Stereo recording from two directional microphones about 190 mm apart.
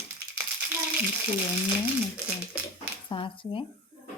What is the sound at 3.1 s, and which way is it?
Speech, 25° left (ahead or behind).